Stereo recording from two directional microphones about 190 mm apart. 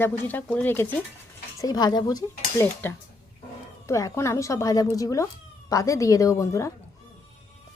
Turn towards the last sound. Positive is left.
turn(degrees=15)  # may be behind; listen again after turning